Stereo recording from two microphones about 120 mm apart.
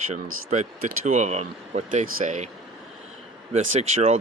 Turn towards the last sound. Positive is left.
turn(degrees=-65)  # may be behind; listen again after turning